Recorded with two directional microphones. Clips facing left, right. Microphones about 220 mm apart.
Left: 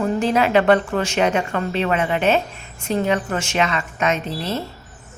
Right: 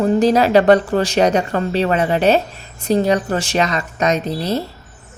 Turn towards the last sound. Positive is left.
turn(degrees=-35)  # may be behind; listen again after turning